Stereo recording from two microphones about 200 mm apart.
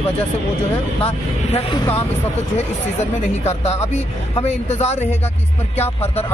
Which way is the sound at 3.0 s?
35° left (ahead or behind).